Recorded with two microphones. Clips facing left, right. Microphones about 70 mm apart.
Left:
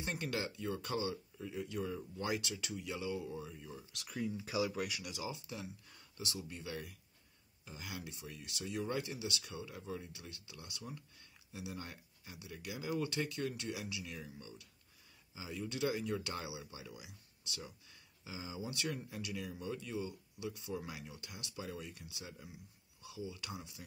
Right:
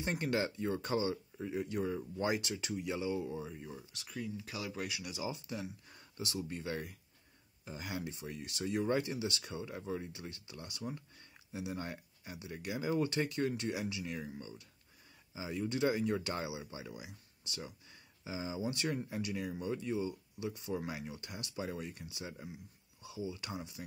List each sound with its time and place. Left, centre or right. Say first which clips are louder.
0.0 s speech: right 5 dB; right
1.6 s speech: right 3 dB; right
1.9 s speech: right 4 dB; right
4.1 s speech: left 3 dB; centre
4.6 s speech: left 1 dB; centre
5.1 s speech: right 3 dB; right
18.5 s speech: right 4 dB; right